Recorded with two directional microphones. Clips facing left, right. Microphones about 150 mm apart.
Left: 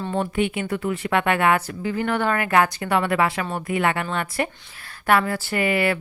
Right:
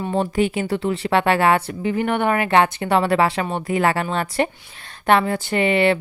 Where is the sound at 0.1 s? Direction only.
35° right (ahead or behind).